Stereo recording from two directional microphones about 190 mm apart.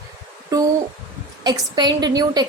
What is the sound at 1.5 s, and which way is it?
A woman's voice, 25° right (ahead or behind).